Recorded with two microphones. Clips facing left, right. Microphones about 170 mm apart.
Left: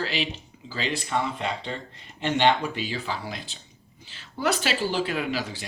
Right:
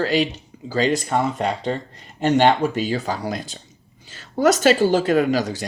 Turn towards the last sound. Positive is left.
turn(degrees=-45)  # may be behind; listen again after turning